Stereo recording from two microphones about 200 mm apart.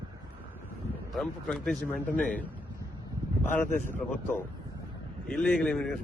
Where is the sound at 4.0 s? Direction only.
10° left (ahead or behind).